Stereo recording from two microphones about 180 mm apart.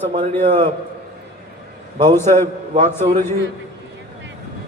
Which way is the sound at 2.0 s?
15° left (ahead or behind).